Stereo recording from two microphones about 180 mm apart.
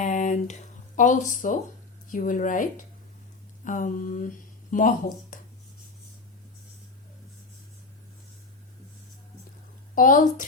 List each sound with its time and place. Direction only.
0.0 s a sound: 45° left (ahead or behind)
0.9 s speech: 45° left (ahead or behind)
9.9 s speech: 50° left (ahead or behind)